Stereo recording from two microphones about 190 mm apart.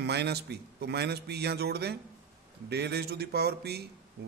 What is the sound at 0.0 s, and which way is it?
A man's voice, 60° right (ahead or behind).